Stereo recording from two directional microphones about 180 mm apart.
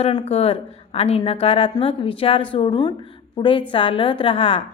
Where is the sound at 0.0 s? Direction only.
30° left (ahead or behind).